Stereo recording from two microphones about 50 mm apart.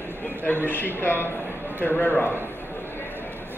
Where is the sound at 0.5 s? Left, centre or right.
Left.